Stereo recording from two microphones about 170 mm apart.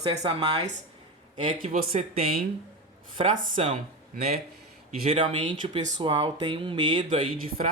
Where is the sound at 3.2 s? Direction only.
35° right (ahead or behind).